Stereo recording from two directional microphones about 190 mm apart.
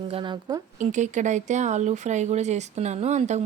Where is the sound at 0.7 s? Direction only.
40° right (ahead or behind).